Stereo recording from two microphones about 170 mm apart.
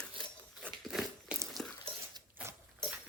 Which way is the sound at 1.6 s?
5° left (ahead or behind).